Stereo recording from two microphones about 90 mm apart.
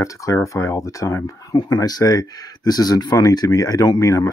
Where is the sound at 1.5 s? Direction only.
45° left (ahead or behind).